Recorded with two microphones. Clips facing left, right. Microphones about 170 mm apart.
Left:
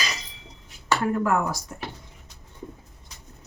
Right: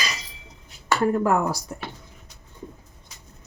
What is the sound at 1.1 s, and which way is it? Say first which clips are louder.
Speech: right 2 dB; 35° right (ahead or behind).